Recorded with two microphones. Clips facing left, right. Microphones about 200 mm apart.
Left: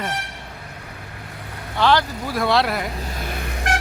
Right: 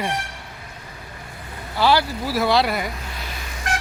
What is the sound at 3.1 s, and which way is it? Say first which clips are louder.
Vehicle: left 5 dB; 55° left (ahead or behind).